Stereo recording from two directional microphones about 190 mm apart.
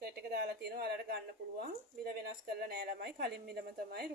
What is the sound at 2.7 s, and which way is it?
A woman's voice, 55° right (ahead or behind).